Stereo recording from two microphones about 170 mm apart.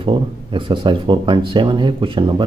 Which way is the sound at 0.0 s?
30° right (ahead or behind).